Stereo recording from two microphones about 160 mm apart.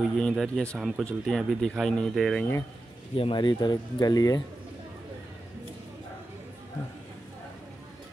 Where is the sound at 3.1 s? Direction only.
30° left (ahead or behind).